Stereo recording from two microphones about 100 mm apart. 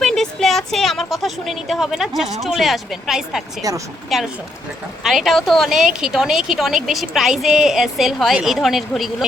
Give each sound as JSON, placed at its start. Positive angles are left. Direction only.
{"t": 0.0, "sound": "a woman's voice", "side_deg": 5}
{"t": 3.6, "sound": "speech", "side_deg": -35}
{"t": 4.1, "sound": "a woman's voice", "side_deg": 0}